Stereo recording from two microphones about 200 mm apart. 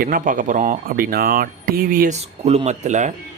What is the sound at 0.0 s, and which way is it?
Speech, 45° right (ahead or behind).